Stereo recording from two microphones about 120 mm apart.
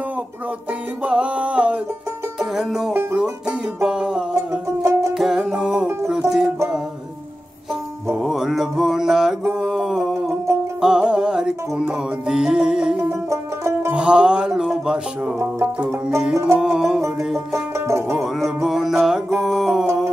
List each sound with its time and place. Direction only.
1.0 s music: 10° right (ahead or behind)
2.9 s music: 20° right (ahead or behind)
3.2 s music: 5° right (ahead or behind)
4.5 s music: 25° right (ahead or behind)
5.1 s music: 5° right (ahead or behind)
8.2 s mantra: centre (ahead or behind)
10.8 s music: 5° right (ahead or behind)
13.1 s banjo: 20° right (ahead or behind)
13.9 s music: 10° right (ahead or behind)
15.3 s music: 15° right (ahead or behind)
16.5 s music: 5° right (ahead or behind)
17.2 s banjo: centre (ahead or behind)
17.7 s music: 25° right (ahead or behind)
18.1 s music: centre (ahead or behind)